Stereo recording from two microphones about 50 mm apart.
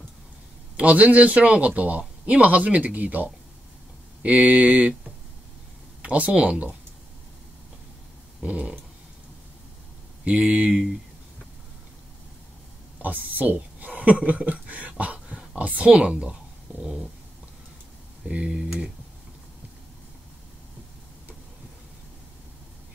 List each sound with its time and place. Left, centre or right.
0.7 s speech: right
6.0 s speech: right
8.4 s a sound: centre
10.5 s speech: right
13.0 s speech: right